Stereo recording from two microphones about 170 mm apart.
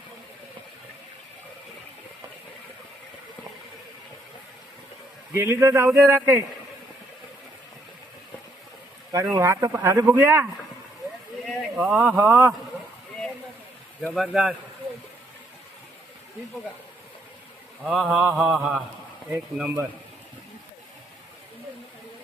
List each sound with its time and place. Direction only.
5.3 s speech: 15° right (ahead or behind)
9.3 s speech: 20° right (ahead or behind)
11.4 s speech: centre (ahead or behind)
14.1 s mantra: centre (ahead or behind)
17.8 s mantra: centre (ahead or behind)
19.3 s speech: 10° right (ahead or behind)